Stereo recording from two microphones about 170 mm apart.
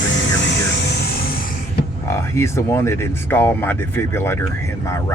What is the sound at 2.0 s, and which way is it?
Speech, 15° left (ahead or behind).